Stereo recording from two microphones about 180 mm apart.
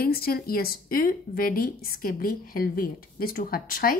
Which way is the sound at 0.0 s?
55° left (ahead or behind).